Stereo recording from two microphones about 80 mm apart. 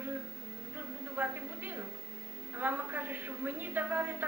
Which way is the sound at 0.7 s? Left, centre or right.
Right.